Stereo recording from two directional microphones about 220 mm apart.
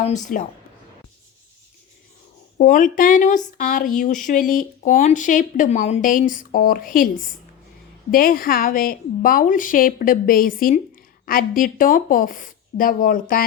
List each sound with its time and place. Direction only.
0.3 s a woman's voice: 35° left (ahead or behind)
2.6 s a woman's voice: 35° left (ahead or behind)